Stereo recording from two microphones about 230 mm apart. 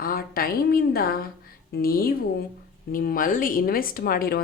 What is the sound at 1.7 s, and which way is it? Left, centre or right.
A woman's voice, left.